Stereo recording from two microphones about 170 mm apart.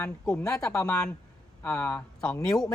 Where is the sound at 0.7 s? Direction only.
15° left (ahead or behind).